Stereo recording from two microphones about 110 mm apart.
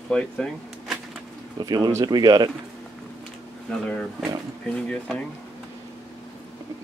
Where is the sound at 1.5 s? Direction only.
35° right (ahead or behind).